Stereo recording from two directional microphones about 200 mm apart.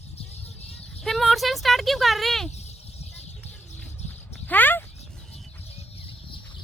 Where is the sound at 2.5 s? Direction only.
35° left (ahead or behind).